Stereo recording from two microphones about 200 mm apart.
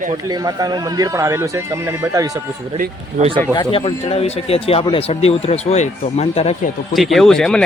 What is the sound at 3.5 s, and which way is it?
Speech, 25° left (ahead or behind).